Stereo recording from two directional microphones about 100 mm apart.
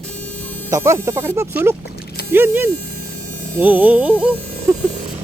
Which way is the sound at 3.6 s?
20° right (ahead or behind).